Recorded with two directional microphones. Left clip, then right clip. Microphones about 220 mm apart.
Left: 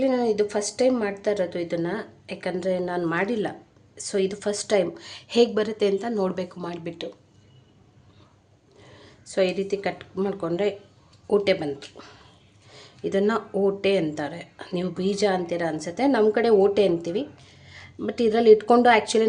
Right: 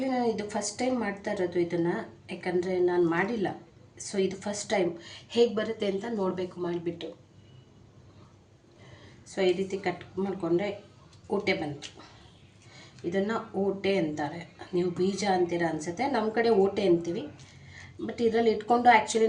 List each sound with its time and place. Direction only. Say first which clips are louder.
0.0 s speech: left 7 dB; 45° left (ahead or behind)
9.0 s speech: left 7 dB; 45° left (ahead or behind)
12.7 s a sound: left 6 dB; 45° left (ahead or behind)
13.8 s speech: left 5 dB; 45° left (ahead or behind)